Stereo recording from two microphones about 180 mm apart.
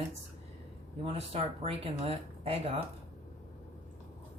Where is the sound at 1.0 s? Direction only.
35° right (ahead or behind).